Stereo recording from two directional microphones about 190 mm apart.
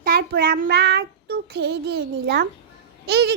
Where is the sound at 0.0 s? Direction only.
50° right (ahead or behind).